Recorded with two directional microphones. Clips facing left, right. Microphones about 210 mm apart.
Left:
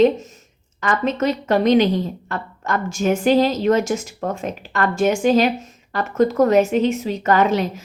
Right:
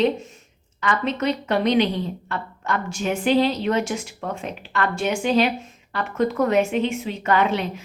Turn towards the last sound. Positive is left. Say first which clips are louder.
# left 4 dB
turn(degrees=40)  # may be behind; listen again after turning